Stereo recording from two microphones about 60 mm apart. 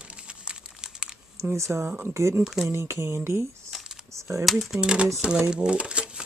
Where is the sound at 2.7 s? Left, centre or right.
Right.